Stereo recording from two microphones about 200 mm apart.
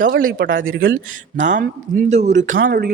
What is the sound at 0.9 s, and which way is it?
Speech, 40° right (ahead or behind).